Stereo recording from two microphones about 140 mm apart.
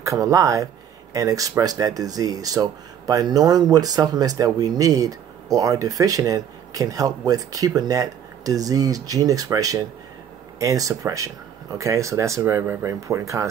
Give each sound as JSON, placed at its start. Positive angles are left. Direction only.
{"t": 0.0, "sound": "speech", "side_deg": -20}